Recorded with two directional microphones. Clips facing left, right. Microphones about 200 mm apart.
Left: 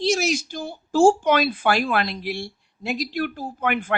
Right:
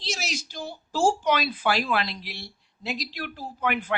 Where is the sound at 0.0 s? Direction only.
50° left (ahead or behind).